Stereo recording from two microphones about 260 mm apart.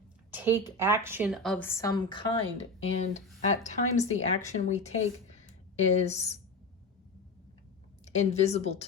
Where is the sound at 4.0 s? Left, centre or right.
Left.